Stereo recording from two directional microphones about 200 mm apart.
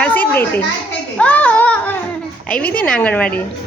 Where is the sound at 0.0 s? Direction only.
10° left (ahead or behind).